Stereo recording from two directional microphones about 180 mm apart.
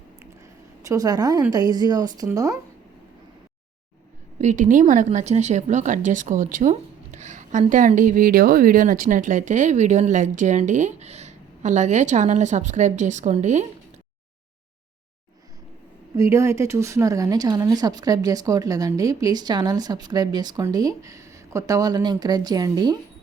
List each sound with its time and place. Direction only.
0.9 s speech: 20° right (ahead or behind)
4.4 s speech: 40° right (ahead or behind)
16.1 s speech: 15° right (ahead or behind)